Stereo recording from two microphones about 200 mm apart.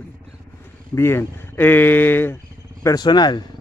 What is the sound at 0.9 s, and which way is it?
Speech, 10° left (ahead or behind).